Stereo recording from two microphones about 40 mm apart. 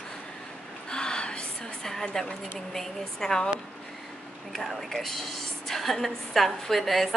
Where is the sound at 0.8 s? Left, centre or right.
Left.